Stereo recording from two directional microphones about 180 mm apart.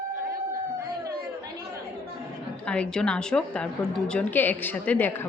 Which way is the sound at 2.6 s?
5° left (ahead or behind).